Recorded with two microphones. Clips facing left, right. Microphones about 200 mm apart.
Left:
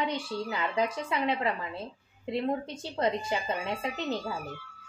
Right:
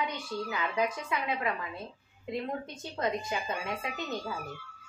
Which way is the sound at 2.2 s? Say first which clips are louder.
Left 5 dB; 30° left (ahead or behind).